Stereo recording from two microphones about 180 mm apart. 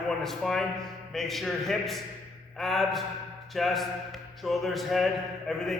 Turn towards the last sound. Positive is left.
turn(degrees=0)  # may be behind; listen again after turning